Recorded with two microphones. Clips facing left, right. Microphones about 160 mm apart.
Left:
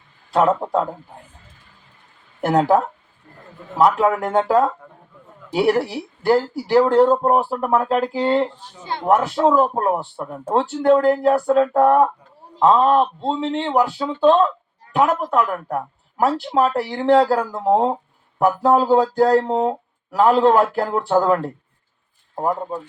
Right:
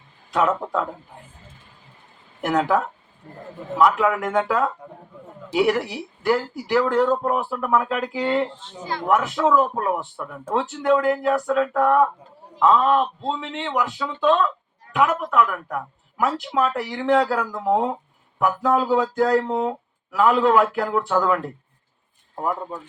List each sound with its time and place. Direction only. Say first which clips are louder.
0.3 s speech: left 4 dB; 35° left (ahead or behind)
2.4 s speech: left 4 dB; 35° left (ahead or behind)